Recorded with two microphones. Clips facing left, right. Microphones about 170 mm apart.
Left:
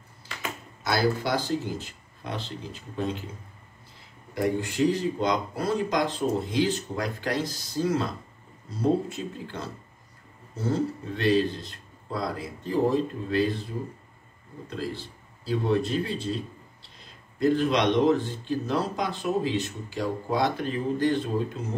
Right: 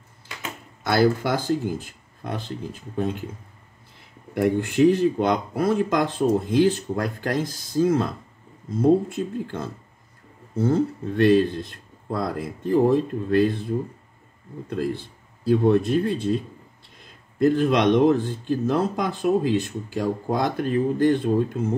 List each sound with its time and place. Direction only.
0.8 s speech: 50° right (ahead or behind)
4.3 s speech: 60° right (ahead or behind)